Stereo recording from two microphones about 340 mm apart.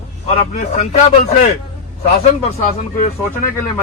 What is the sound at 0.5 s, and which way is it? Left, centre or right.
Speech, left.